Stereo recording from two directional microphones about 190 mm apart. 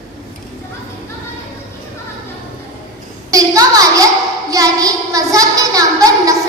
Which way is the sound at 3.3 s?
20° right (ahead or behind).